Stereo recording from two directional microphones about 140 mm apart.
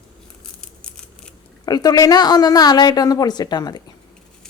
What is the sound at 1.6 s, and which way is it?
A woman's voice, 30° left (ahead or behind).